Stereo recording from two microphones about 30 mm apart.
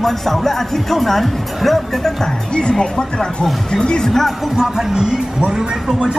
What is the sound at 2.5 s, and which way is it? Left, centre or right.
Speech, left.